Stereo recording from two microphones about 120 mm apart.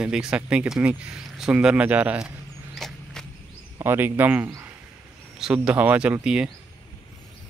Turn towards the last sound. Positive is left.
turn(degrees=-5)  # may be behind; listen again after turning